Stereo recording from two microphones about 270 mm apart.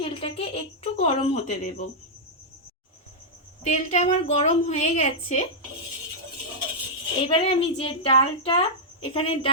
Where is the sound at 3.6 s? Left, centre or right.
Left.